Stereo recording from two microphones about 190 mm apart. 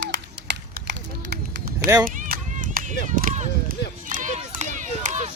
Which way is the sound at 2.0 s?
45° right (ahead or behind).